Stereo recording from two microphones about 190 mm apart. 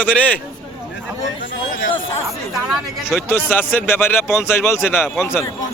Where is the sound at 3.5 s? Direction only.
10° left (ahead or behind).